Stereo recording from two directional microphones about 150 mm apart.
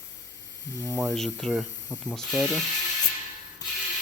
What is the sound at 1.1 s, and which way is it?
Speech, 5° left (ahead or behind).